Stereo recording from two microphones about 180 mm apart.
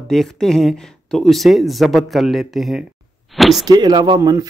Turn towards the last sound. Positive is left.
turn(degrees=-20)  # may be behind; listen again after turning